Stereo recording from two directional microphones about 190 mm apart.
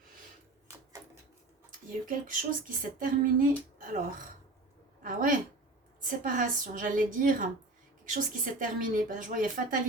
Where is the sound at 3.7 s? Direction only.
45° right (ahead or behind).